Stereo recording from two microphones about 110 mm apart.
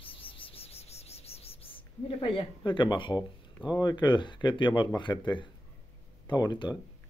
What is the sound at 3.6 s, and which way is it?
Speech, 40° left (ahead or behind).